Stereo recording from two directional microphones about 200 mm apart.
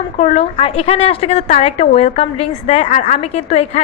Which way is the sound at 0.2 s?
35° left (ahead or behind).